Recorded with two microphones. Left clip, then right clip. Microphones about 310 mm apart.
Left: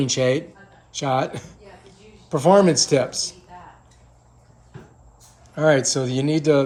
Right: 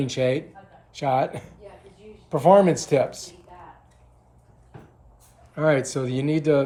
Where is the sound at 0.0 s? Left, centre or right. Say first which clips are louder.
Left 3 dB; centre.